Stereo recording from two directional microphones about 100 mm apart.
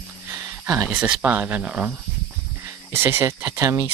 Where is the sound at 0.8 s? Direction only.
15° right (ahead or behind).